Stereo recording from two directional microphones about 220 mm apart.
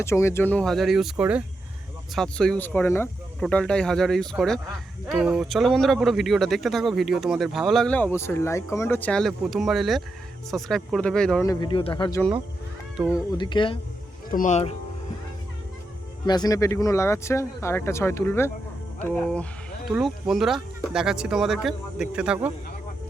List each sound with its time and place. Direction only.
0.0 s speech: 10° left (ahead or behind)
11.4 s speech: 20° left (ahead or behind)
13.0 s speech: 5° right (ahead or behind)
13.3 s speech: 20° left (ahead or behind)
14.3 s speech: 35° left (ahead or behind)
16.2 s speech: 20° left (ahead or behind); by 22.4 s 5° right (ahead or behind)